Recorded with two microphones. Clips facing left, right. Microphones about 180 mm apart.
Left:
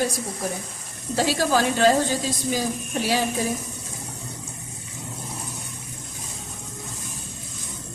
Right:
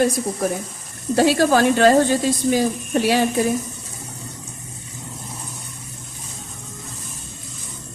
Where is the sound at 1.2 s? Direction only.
60° right (ahead or behind).